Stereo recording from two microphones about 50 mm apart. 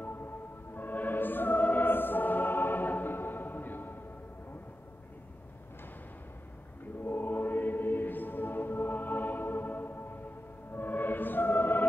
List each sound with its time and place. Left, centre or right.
0.0 s music: left
7.1 s music: left